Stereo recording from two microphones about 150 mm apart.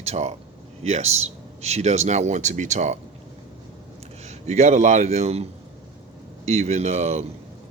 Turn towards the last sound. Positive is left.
turn(degrees=-50)  # may be behind; listen again after turning